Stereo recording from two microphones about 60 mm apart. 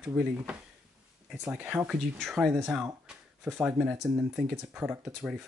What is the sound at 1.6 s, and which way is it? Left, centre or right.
Speech, right.